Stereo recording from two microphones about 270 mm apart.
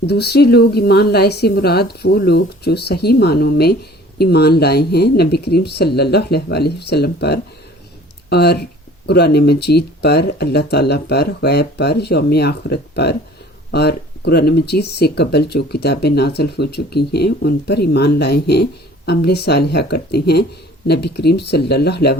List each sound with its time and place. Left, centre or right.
0.0 s speech: left